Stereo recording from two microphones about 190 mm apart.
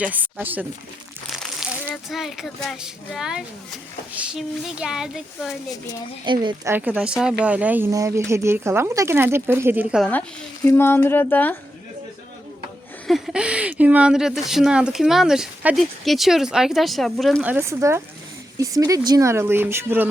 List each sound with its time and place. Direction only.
0.0 s speech: 10° right (ahead or behind)
6.2 s a woman's voice: 25° right (ahead or behind)
6.7 s speech: 10° right (ahead or behind)
10.0 s speech: 10° left (ahead or behind)
13.1 s speech: centre (ahead or behind)